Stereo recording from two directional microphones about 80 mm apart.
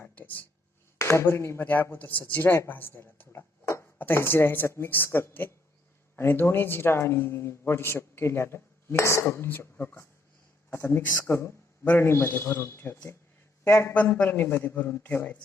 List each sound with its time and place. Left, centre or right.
0.0 s a sound: left
0.9 s a man's voice: left
13.9 s speech: centre